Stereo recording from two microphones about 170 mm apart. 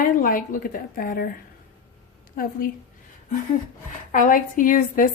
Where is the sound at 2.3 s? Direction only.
55° left (ahead or behind).